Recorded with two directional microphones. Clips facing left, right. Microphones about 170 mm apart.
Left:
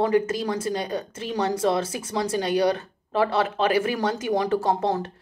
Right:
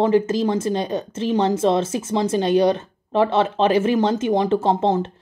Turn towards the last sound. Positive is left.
turn(degrees=-25)  # may be behind; listen again after turning